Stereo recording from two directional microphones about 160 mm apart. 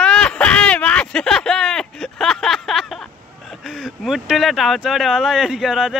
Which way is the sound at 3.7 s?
Centre (ahead or behind).